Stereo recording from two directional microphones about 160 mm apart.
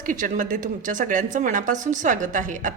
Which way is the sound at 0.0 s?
55° right (ahead or behind).